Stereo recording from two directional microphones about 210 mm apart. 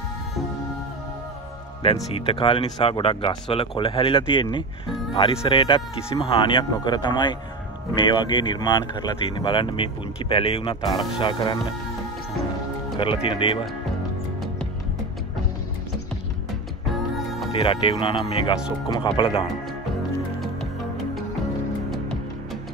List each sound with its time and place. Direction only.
1.8 s speech: 30° left (ahead or behind)
12.9 s speech: 25° left (ahead or behind)
17.5 s speech: 25° left (ahead or behind)